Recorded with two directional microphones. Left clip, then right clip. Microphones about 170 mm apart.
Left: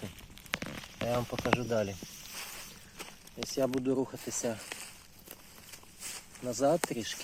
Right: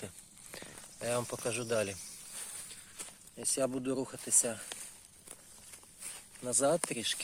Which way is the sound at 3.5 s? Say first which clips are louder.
Left 2 dB; 20° right (ahead or behind).